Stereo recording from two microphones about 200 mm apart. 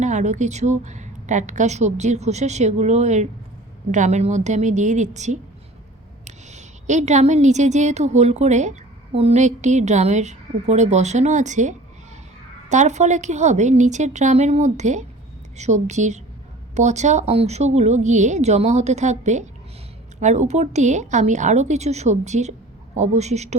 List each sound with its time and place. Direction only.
0.0 s a woman's voice: 35° right (ahead or behind)